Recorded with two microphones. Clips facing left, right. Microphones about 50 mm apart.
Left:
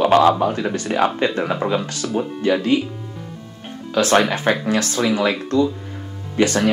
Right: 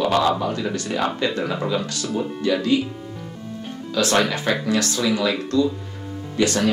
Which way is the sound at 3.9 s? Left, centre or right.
Left.